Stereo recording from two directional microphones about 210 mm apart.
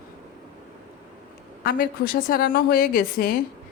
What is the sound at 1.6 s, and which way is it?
A woman's voice, 45° left (ahead or behind).